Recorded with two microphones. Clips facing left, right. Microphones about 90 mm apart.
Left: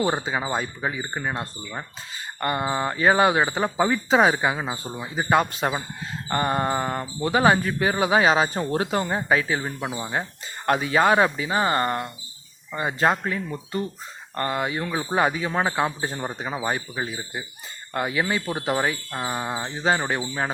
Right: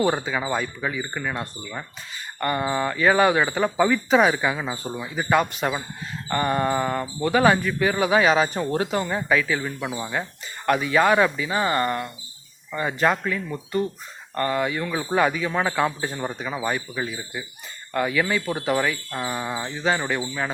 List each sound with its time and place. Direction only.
0.0 s speech: 25° left (ahead or behind)
4.7 s speech: 20° left (ahead or behind)
5.0 s speech: 30° left (ahead or behind)